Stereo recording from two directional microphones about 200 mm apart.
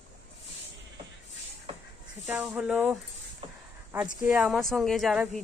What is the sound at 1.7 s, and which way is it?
Snake, 30° right (ahead or behind).